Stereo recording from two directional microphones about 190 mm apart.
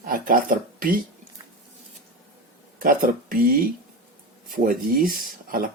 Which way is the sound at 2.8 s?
50° right (ahead or behind).